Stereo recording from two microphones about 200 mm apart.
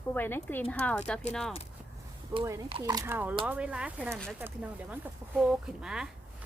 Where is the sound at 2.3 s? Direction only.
15° right (ahead or behind).